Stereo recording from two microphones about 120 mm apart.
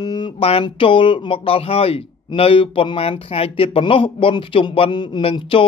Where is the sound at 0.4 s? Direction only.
55° left (ahead or behind).